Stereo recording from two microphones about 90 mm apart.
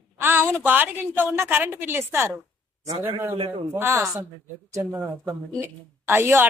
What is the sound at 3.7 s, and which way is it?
Speech, 30° right (ahead or behind).